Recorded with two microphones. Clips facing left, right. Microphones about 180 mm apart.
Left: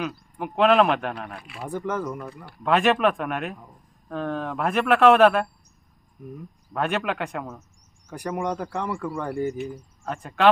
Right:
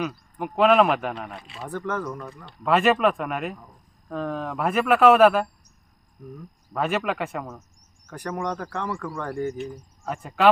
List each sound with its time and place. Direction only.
0.0 s speech: centre (ahead or behind)
1.4 s speech: 25° right (ahead or behind)
1.6 s speech: 10° left (ahead or behind)
2.6 s speech: centre (ahead or behind)
6.7 s speech: centre (ahead or behind)
8.1 s speech: 10° left (ahead or behind)
10.1 s speech: 5° right (ahead or behind)